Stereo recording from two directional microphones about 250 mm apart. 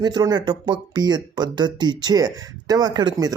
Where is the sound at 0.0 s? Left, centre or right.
Centre.